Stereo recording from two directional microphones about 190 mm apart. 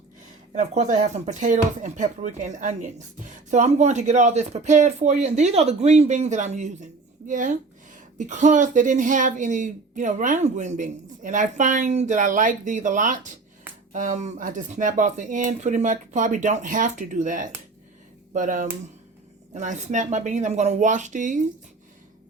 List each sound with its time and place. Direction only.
0.5 s speech: 35° right (ahead or behind)